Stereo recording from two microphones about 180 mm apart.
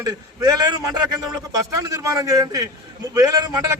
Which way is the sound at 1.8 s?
20° right (ahead or behind).